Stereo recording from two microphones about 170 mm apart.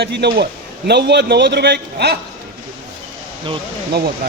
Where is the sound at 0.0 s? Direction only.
75° right (ahead or behind).